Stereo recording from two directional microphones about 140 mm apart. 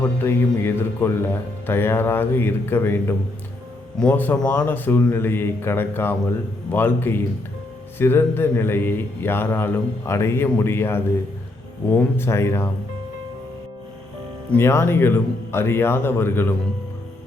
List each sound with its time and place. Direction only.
0.2 s a man's voice: 15° left (ahead or behind)
14.5 s a man's voice: 20° left (ahead or behind)